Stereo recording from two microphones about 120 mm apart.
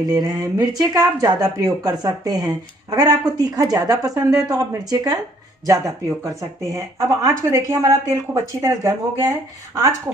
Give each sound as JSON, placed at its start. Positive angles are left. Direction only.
{"t": 0.1, "sound": "speech", "side_deg": -30}